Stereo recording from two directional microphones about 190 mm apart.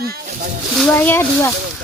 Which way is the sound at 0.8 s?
10° left (ahead or behind).